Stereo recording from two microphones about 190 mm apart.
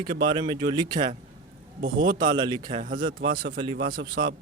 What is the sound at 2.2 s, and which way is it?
Speech, 20° right (ahead or behind).